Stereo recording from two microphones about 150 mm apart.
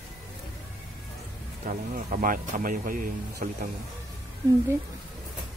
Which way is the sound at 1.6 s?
65° right (ahead or behind).